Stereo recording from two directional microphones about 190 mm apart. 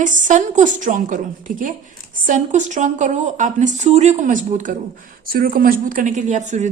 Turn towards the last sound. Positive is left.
turn(degrees=-40)  # may be behind; listen again after turning